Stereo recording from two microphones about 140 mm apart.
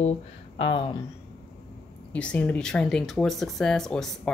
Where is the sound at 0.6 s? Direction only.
40° left (ahead or behind).